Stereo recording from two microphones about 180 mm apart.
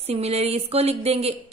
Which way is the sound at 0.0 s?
35° right (ahead or behind).